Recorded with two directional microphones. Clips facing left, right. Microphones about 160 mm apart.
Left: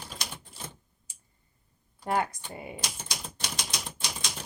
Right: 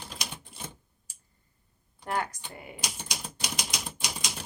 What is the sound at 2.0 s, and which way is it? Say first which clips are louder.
Speech: left 3 dB; 20° left (ahead or behind).